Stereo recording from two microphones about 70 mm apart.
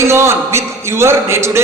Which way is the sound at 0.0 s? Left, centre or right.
Right.